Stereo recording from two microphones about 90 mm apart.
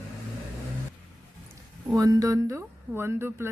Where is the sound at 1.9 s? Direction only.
40° right (ahead or behind).